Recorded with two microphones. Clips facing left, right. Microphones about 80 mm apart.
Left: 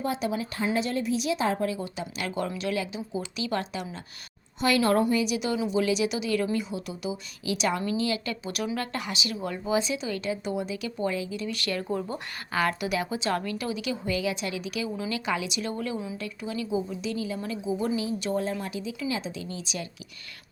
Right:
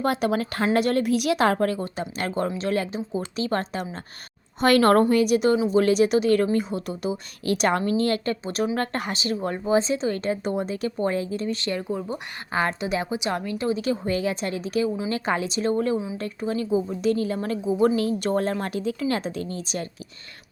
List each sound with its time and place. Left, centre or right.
0.0 s a woman's voice: right
4.6 s a woman's voice: right
11.5 s a woman's voice: right